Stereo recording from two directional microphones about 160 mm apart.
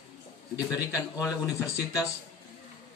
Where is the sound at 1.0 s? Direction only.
20° left (ahead or behind).